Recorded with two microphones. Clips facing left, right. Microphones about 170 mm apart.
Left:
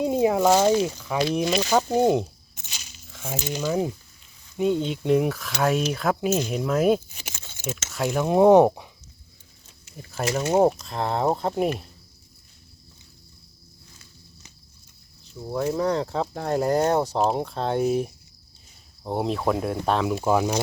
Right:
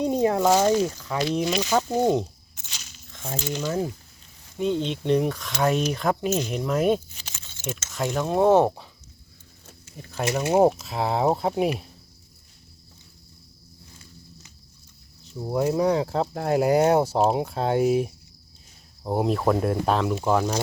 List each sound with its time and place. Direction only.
0.0 s a sound: 10° left (ahead or behind)
0.9 s speech: 15° left (ahead or behind)
2.6 s a sound: 10° left (ahead or behind)
3.4 s speech: 10° left (ahead or behind)
10.0 s speech: centre (ahead or behind)
10.4 s speech: 10° right (ahead or behind)
15.6 s speech: 10° right (ahead or behind); by 20.6 s 5° left (ahead or behind)